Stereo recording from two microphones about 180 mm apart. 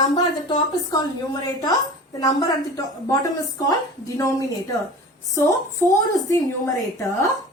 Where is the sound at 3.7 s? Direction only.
15° left (ahead or behind).